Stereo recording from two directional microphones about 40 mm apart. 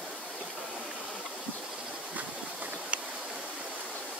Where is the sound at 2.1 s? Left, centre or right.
Right.